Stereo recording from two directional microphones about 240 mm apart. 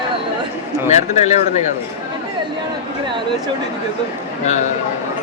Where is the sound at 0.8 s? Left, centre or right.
Left.